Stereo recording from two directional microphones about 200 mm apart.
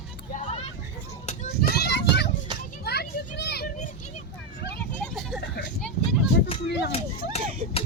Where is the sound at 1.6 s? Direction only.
55° left (ahead or behind).